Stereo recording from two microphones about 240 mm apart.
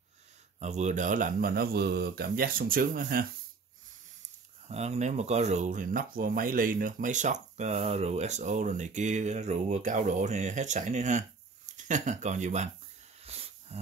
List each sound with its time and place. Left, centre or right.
0.6 s speech: right
4.6 s speech: right
13.2 s a sound: right